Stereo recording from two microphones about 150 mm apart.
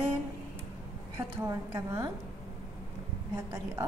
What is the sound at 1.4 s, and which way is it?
Speech, 20° right (ahead or behind).